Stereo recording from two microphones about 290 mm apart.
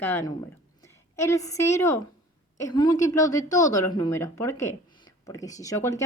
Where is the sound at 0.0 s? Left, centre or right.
Centre.